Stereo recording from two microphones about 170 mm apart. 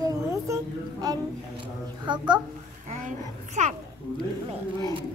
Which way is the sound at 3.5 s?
45° right (ahead or behind).